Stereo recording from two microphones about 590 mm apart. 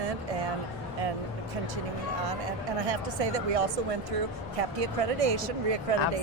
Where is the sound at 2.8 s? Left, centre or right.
Right.